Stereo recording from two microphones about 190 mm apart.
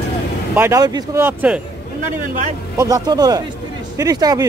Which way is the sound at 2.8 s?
20° right (ahead or behind).